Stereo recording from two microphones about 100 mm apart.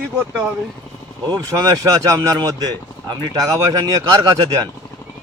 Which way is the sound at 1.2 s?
40° right (ahead or behind).